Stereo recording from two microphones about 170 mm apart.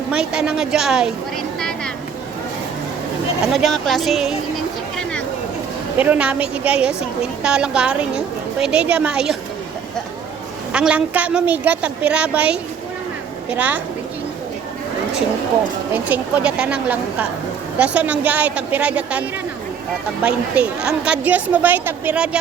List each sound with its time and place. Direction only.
0.1 s a woman's voice: 5° right (ahead or behind)
3.4 s a woman's voice: centre (ahead or behind)
6.0 s a woman's voice: 10° right (ahead or behind)
10.7 s a woman's voice: 5° right (ahead or behind)
15.9 s a woman's voice: 10° right (ahead or behind)
20.2 s a woman's voice: 5° right (ahead or behind)